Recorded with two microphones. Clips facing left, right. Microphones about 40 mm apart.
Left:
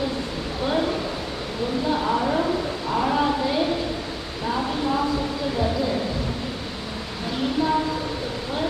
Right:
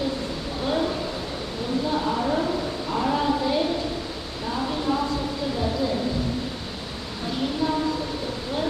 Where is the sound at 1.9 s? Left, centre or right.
Centre.